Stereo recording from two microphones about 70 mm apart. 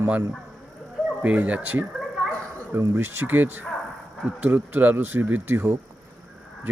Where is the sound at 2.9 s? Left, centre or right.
Right.